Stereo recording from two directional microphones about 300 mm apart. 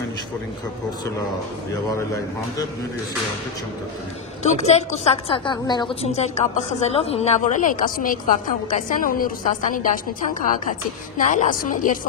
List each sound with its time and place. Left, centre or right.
4.4 s a woman's voice: left